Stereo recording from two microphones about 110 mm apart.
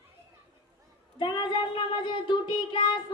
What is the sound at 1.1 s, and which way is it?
Child singing, 45° left (ahead or behind).